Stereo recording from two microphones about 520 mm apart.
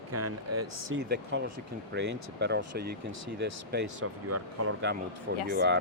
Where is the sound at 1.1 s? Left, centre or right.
Centre.